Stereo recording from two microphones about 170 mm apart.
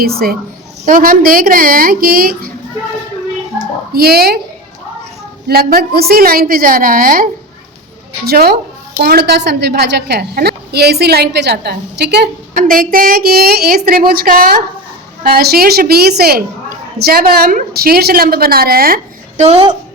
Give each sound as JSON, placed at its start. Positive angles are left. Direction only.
{"t": 0.0, "sound": "a woman's voice", "side_deg": -65}
{"t": 3.9, "sound": "a woman's voice", "side_deg": -65}
{"t": 5.5, "sound": "a woman's voice", "side_deg": -60}
{"t": 19.4, "sound": "a woman's voice", "side_deg": -35}